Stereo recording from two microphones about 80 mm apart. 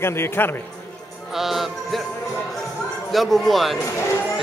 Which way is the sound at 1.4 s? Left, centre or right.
Centre.